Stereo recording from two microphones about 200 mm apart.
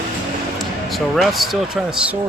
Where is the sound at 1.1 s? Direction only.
Centre (ahead or behind).